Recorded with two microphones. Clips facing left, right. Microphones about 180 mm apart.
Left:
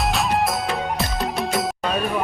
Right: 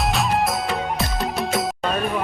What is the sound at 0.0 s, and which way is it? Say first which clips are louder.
Music: even; centre (ahead or behind).